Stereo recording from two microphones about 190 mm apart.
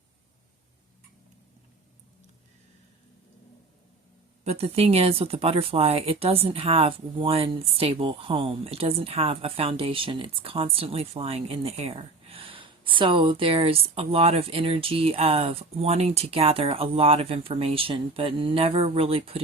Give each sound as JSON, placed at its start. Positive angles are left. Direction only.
{"t": 4.4, "sound": "speech", "side_deg": -30}